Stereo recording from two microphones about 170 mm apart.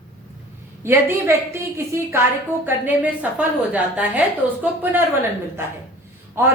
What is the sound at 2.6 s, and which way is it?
A woman's voice, 10° right (ahead or behind).